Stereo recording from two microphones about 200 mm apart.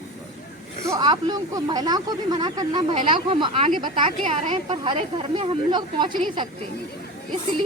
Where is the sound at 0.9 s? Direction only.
20° right (ahead or behind).